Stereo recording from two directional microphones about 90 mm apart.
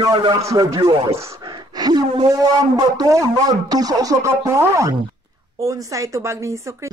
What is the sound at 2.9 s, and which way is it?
Speech, 40° right (ahead or behind).